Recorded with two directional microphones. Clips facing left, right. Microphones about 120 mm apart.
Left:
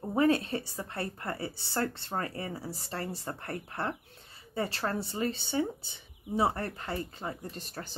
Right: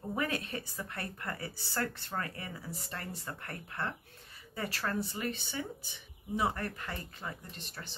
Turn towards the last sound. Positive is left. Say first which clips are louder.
# left 7 dB
turn(degrees=40)  # may be behind; listen again after turning